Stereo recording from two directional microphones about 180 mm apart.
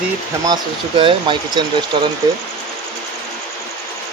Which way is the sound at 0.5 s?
30° right (ahead or behind).